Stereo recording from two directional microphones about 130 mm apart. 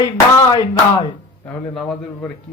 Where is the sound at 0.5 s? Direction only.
30° left (ahead or behind).